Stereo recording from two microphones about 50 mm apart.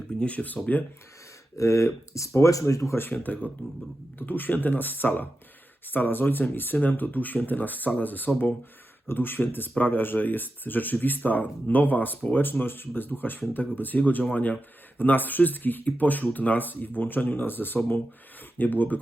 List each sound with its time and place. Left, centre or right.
0.2 s speech: left
1.5 s speech: left
3.0 s speech: left